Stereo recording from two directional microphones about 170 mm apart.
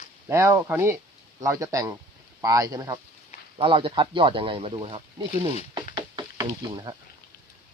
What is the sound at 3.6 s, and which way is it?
Speech, 30° right (ahead or behind).